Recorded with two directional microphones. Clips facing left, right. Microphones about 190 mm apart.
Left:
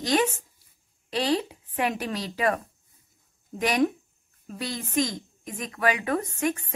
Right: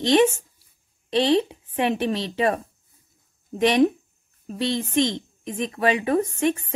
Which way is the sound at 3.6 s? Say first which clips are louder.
Right 6 dB; 25° right (ahead or behind).